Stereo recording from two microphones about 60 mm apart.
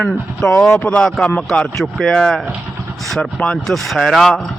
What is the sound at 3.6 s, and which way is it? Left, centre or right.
Speech, centre.